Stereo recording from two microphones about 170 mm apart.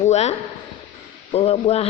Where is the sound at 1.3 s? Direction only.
35° left (ahead or behind).